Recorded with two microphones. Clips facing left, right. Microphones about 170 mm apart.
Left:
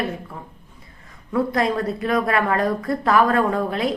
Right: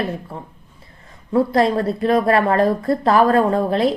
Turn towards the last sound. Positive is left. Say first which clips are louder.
# right 4 dB
turn(degrees=-35)  # may be behind; listen again after turning